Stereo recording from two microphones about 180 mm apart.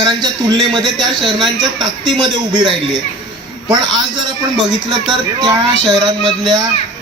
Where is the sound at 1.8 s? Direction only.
25° right (ahead or behind).